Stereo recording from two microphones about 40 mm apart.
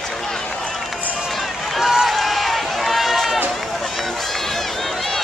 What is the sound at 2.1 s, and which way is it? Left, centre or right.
Run, centre.